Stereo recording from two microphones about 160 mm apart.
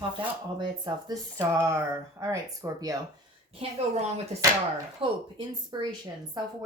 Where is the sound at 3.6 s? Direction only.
40° right (ahead or behind).